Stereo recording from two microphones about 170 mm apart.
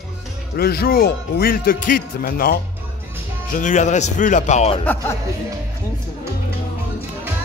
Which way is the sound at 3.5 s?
50° left (ahead or behind).